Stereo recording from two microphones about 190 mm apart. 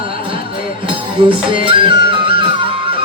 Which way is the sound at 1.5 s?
25° right (ahead or behind).